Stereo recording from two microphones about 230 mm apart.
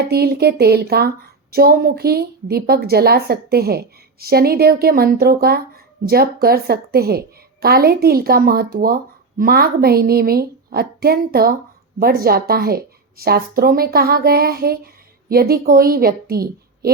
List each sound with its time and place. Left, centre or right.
0.0 s speech: right